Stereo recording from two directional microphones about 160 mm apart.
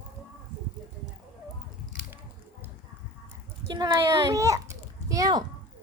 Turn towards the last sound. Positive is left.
turn(degrees=-20)  # may be behind; listen again after turning